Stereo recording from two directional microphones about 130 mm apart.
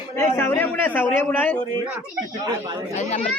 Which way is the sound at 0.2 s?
20° left (ahead or behind).